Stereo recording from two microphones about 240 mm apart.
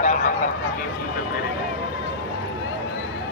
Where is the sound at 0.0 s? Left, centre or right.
Left.